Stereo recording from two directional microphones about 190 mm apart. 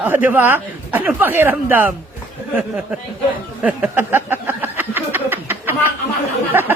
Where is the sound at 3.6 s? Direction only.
10° right (ahead or behind).